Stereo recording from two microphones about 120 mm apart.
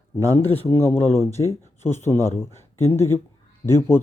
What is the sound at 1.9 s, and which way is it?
Speech, 20° left (ahead or behind).